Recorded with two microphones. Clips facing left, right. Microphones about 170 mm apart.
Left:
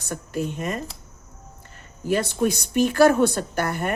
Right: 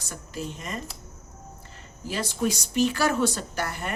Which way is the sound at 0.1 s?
55° left (ahead or behind).